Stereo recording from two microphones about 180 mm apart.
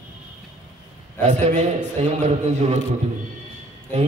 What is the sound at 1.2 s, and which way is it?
A man's voice, 40° right (ahead or behind).